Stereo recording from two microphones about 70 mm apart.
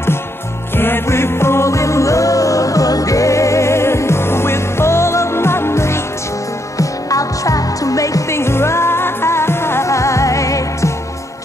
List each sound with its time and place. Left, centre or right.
0.7 s music: left
6.8 s music: left